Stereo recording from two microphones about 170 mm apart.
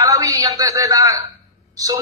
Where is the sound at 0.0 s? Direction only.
20° right (ahead or behind).